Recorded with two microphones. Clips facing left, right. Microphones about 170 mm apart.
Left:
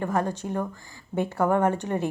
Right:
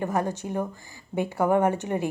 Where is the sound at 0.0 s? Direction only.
15° right (ahead or behind).